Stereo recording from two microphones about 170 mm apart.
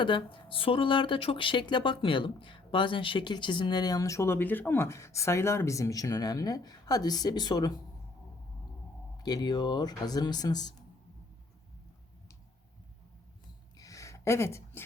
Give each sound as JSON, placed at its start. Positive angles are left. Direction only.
{"t": 0.0, "sound": "speech", "side_deg": 30}
{"t": 9.1, "sound": "speech", "side_deg": 25}
{"t": 13.7, "sound": "a sound", "side_deg": 20}